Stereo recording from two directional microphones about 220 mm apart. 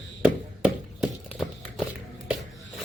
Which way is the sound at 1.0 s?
Centre (ahead or behind).